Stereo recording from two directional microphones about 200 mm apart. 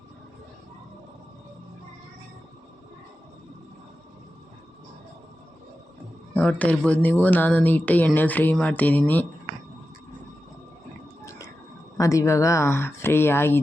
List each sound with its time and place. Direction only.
6.3 s speech: 5° left (ahead or behind)
11.3 s a sound: 15° left (ahead or behind)
11.9 s speech: 15° left (ahead or behind)